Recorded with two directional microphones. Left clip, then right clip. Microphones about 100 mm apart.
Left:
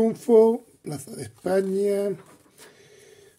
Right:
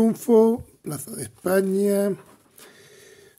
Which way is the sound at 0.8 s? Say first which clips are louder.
Right 1 dB; 30° right (ahead or behind).